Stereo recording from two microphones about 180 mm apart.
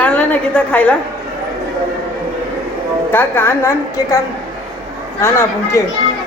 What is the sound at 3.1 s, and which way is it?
Speech, 10° left (ahead or behind).